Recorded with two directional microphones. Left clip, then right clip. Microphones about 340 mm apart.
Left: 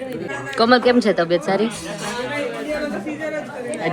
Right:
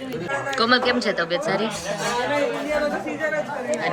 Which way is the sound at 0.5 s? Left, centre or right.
Centre.